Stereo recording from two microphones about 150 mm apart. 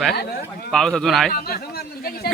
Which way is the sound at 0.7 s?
5° left (ahead or behind).